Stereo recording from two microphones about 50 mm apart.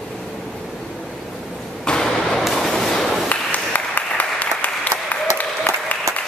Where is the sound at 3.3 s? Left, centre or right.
Left.